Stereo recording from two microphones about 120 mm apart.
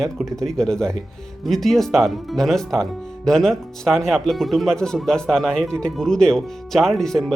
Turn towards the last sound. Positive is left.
turn(degrees=0)  # may be behind; listen again after turning